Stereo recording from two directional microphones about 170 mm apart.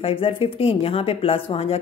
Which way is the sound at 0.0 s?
30° left (ahead or behind).